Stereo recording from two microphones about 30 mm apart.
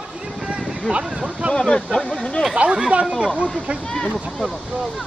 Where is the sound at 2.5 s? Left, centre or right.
Right.